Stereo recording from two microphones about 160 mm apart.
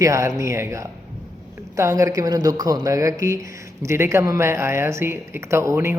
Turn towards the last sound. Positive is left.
turn(degrees=-20)  # may be behind; listen again after turning